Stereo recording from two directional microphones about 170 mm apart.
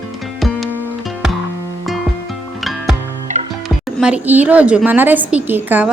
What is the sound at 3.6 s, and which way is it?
A woman's voice, 5° right (ahead or behind).